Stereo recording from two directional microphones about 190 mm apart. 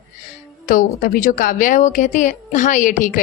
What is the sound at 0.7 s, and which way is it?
A woman's voice, 50° left (ahead or behind).